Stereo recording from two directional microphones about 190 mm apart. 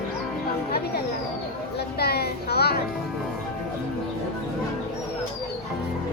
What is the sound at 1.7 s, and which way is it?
Children playing, 55° left (ahead or behind).